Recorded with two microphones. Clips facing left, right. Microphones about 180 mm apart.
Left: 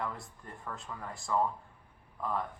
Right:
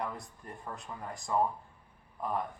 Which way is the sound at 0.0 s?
20° right (ahead or behind).